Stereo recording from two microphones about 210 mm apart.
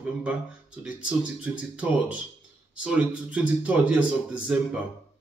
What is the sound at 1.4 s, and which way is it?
A man's voice, 5° right (ahead or behind).